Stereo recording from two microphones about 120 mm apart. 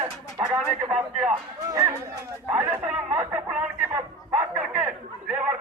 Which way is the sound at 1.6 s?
30° right (ahead or behind).